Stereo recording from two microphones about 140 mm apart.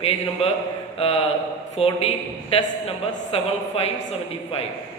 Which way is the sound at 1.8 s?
45° left (ahead or behind).